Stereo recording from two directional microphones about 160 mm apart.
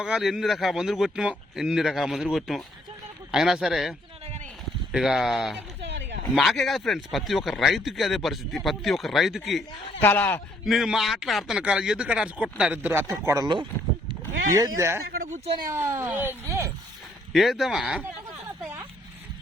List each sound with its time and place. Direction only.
0.0 s speech: 5° right (ahead or behind)
5.8 s a sound: 90° right
6.3 s speech: centre (ahead or behind)
10.0 s speech: 10° left (ahead or behind)
10.7 s speech: centre (ahead or behind); by 13.7 s 25° right (ahead or behind)
14.1 s a sound: 25° right (ahead or behind)
14.8 s speech: 15° right (ahead or behind)
15.0 s a sound: 65° right (ahead or behind)
15.7 s speech: 15° right (ahead or behind)
17.3 s speech: centre (ahead or behind)